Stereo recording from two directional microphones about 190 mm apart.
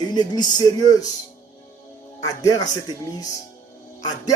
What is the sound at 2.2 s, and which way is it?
Speech, 20° left (ahead or behind).